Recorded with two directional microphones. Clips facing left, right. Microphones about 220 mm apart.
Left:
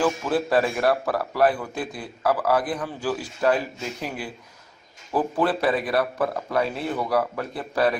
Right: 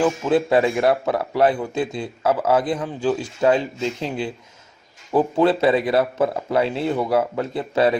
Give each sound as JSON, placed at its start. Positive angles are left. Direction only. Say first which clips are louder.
{"t": 0.0, "sound": "a man's voice", "louder": "right 4 dB", "side_deg": -20}